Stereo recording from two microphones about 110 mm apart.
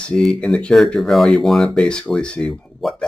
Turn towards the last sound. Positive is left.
turn(degrees=5)  # may be behind; listen again after turning